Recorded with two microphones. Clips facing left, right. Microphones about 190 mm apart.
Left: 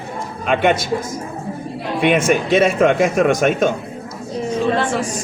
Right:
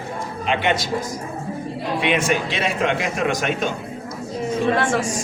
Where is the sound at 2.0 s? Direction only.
50° left (ahead or behind).